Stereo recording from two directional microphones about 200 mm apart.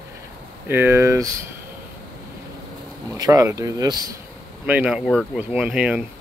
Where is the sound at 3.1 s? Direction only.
20° right (ahead or behind).